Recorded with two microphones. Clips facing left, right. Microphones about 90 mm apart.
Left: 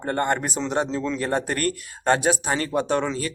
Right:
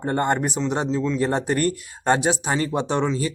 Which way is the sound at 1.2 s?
20° right (ahead or behind).